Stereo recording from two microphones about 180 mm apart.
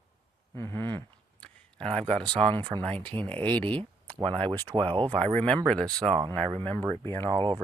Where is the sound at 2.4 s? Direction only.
30° right (ahead or behind).